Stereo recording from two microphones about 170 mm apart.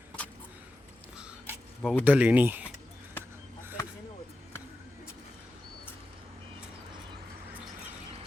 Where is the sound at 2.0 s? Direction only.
10° right (ahead or behind).